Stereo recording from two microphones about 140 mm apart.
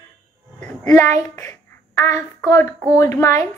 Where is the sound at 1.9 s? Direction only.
20° left (ahead or behind).